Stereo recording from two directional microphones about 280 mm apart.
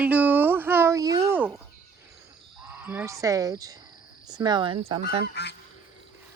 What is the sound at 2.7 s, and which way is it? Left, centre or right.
Speech, centre.